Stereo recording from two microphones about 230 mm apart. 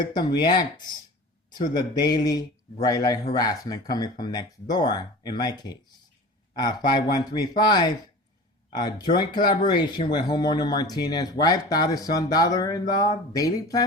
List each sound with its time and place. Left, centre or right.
0.0 s speech: centre